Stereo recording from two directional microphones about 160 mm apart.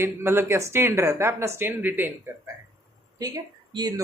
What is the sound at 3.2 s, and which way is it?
Speech, 25° right (ahead or behind).